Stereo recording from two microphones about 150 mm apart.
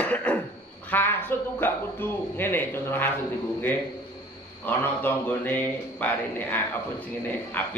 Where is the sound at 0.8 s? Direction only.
15° left (ahead or behind).